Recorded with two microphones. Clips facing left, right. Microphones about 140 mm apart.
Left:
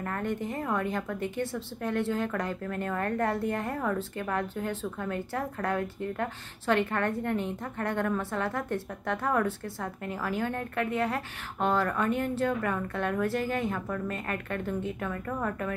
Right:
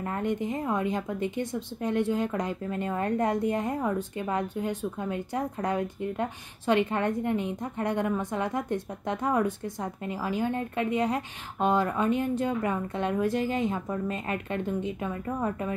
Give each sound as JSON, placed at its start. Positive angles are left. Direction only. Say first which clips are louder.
{"t": 0.0, "sound": "a woman's voice", "louder": "right 3 dB", "side_deg": -15}